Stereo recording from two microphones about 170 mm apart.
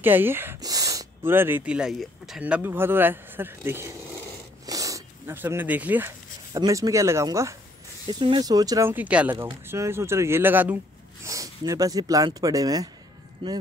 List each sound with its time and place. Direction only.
0.0 s speech: 10° right (ahead or behind)
4.6 s zipper: 20° right (ahead or behind)
6.5 s a man's voice: 20° right (ahead or behind)